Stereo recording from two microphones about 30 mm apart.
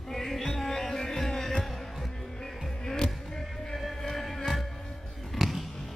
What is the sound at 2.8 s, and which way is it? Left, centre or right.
Hum, left.